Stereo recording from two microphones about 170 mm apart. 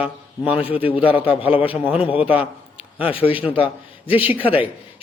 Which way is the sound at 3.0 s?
35° left (ahead or behind).